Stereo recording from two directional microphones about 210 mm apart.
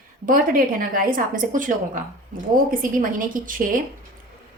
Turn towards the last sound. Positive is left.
turn(degrees=-40)  # may be behind; listen again after turning